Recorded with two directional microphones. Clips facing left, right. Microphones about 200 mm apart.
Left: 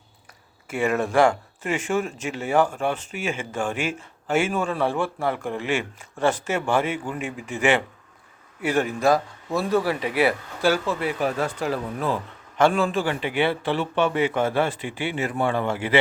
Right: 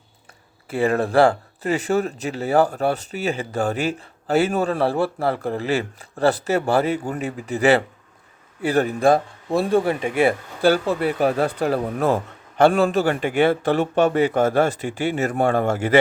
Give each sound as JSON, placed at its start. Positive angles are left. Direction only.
{"t": 0.7, "sound": "speech", "side_deg": -35}
{"t": 11.6, "sound": "a man's voice", "side_deg": -50}